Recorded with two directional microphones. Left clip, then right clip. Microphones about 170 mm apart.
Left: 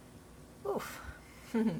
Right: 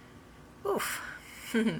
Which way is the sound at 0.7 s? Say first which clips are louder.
Right 6 dB; 15° right (ahead or behind).